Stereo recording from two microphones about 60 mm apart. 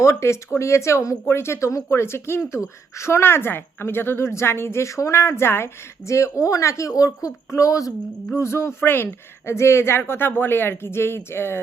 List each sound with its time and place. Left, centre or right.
0.0 s a woman's voice: left
1.2 s a woman's voice: left
5.2 s a woman's voice: left
6.1 s speech: left
8.4 s a woman's voice: left